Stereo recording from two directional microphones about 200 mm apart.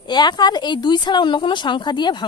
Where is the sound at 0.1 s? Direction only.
20° left (ahead or behind).